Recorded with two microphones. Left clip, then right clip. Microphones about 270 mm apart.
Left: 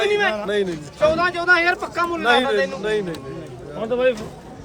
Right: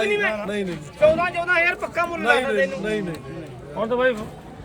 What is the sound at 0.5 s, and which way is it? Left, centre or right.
Speech, centre.